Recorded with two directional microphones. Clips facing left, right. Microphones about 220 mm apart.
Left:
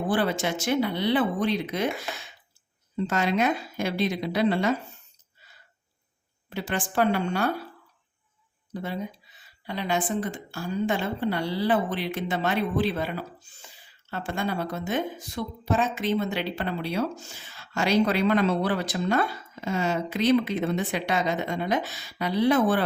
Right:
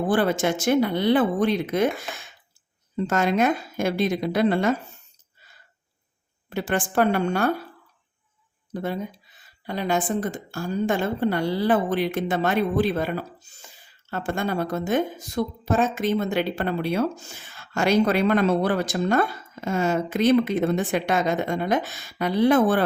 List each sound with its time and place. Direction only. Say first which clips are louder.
0.1 s a woman's voice: right 4 dB; 50° right (ahead or behind)
3.1 s a woman's voice: right 3 dB; 50° right (ahead or behind)
6.5 s a woman's voice: right 5 dB; 50° right (ahead or behind)
8.7 s a woman's voice: right 4 dB; 50° right (ahead or behind)